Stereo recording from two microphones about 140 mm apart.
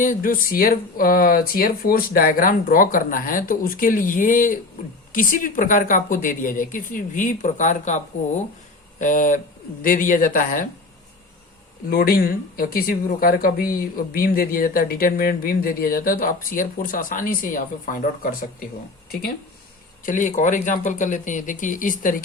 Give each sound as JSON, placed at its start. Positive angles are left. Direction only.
{"t": 0.0, "sound": "speech", "side_deg": 80}
{"t": 9.8, "sound": "speech", "side_deg": 80}
{"t": 11.9, "sound": "speech", "side_deg": 90}
{"t": 20.1, "sound": "speech", "side_deg": 65}